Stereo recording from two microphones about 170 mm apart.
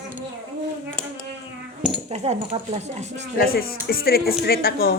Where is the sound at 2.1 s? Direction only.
40° right (ahead or behind).